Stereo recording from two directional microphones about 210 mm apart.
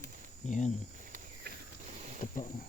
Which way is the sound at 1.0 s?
40° right (ahead or behind).